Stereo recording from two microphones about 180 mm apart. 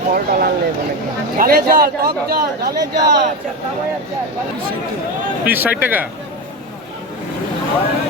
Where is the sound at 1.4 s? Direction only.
55° right (ahead or behind).